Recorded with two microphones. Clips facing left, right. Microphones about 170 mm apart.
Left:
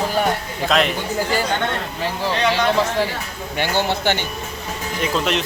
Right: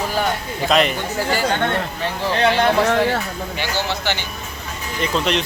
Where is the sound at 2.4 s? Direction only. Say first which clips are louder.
Right 3 dB; 65° right (ahead or behind).